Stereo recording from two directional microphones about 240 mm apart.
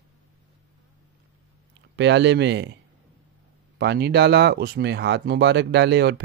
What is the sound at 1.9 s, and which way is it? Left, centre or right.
Speech, right.